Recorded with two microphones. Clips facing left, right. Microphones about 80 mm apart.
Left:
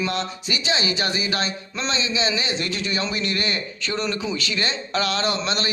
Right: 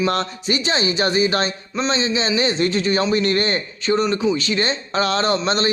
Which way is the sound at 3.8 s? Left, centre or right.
Right.